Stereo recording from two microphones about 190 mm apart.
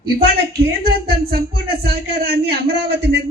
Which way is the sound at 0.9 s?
55° right (ahead or behind).